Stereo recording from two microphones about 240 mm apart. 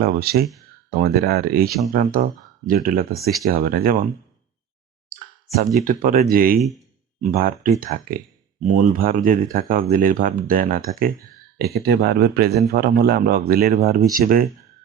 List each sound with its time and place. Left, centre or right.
0.0 s speech: right
5.8 s speech: right